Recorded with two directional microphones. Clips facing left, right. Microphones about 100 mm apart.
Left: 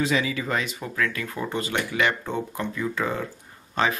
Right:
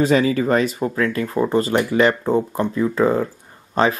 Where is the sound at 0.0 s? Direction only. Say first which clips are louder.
Right 8 dB; 45° right (ahead or behind).